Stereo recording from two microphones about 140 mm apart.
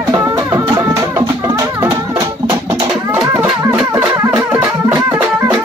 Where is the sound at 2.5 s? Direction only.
30° right (ahead or behind).